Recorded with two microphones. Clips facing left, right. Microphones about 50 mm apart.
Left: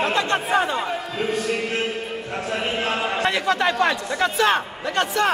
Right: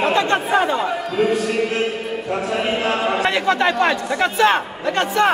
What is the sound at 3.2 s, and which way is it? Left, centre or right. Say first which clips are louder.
A man's voice: right 1 dB; right.